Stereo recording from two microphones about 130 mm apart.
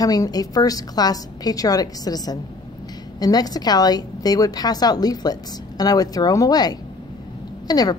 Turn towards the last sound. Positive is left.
turn(degrees=30)  # may be behind; listen again after turning